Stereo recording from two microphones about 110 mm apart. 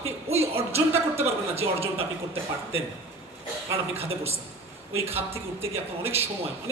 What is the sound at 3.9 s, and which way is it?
A man's voice, 65° right (ahead or behind).